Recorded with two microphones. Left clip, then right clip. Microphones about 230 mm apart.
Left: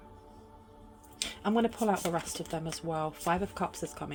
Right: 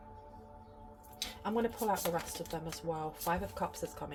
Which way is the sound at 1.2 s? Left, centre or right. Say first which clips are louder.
Left 5 dB; left.